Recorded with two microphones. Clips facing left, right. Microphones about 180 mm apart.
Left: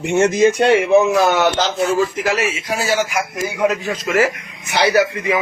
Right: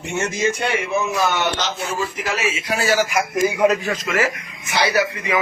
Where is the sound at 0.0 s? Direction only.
70° left (ahead or behind).